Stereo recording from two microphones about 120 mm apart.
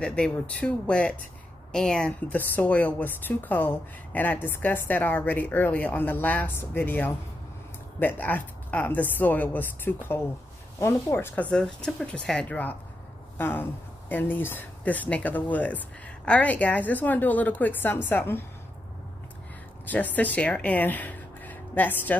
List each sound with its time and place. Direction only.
0.0 s a woman's voice: 10° left (ahead or behind)
11.5 s a woman's voice: 5° left (ahead or behind)
19.9 s speech: 15° left (ahead or behind)